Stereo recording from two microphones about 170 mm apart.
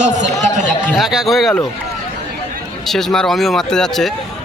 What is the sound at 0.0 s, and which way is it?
Speech, 45° right (ahead or behind).